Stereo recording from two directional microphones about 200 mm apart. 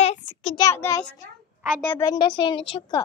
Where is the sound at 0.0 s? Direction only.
30° left (ahead or behind).